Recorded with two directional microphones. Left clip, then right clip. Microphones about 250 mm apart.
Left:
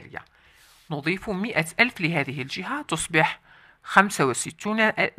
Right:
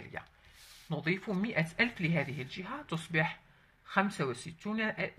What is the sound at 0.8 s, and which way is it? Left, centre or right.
A woman's voice, left.